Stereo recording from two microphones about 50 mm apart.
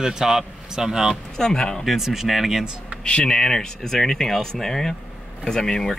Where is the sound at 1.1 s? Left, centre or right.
Centre.